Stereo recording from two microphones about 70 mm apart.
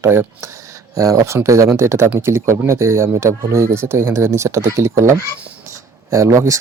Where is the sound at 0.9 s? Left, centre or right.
Right.